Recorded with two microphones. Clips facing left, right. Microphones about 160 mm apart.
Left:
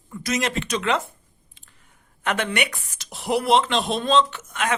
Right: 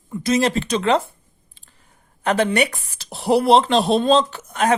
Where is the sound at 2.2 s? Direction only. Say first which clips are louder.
Right 6 dB; 35° right (ahead or behind).